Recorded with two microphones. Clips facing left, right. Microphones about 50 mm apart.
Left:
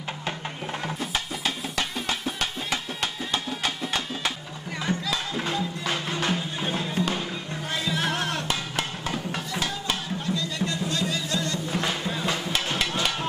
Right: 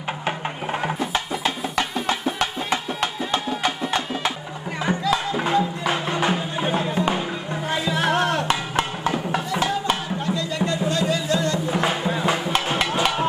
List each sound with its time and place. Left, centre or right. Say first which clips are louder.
0.3 s music: right 6 dB; right
7.9 s music: right 9 dB; right